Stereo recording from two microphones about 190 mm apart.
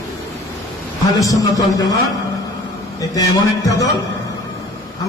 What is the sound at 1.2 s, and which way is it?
Speech, 15° left (ahead or behind).